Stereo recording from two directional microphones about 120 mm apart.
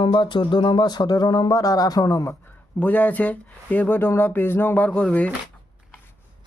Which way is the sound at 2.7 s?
15° left (ahead or behind).